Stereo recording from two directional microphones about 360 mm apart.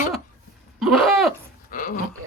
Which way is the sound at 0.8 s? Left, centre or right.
Centre.